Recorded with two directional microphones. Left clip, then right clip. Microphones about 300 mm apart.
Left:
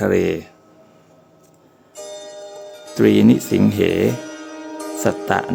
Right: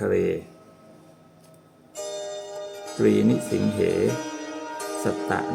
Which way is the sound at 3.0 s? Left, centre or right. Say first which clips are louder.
Left 7 dB; left.